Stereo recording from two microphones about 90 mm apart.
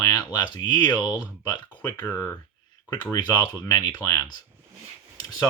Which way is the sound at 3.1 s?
50° left (ahead or behind).